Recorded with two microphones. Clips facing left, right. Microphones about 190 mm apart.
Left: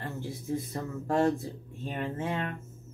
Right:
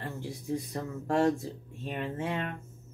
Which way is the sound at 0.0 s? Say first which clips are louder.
Left 1 dB; centre (ahead or behind).